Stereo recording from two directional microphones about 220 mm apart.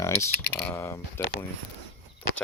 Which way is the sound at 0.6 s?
10° left (ahead or behind).